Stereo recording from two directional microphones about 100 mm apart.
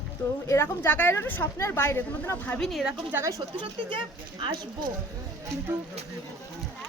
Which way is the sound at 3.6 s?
55° right (ahead or behind).